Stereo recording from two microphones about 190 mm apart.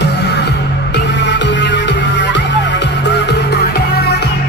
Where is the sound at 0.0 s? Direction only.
60° left (ahead or behind).